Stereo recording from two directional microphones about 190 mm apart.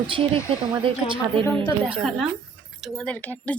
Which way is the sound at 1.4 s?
30° right (ahead or behind).